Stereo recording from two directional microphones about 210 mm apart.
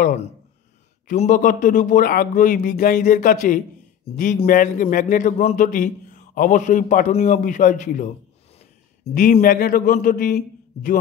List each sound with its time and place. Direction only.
0.0 s a man's voice: 30° left (ahead or behind)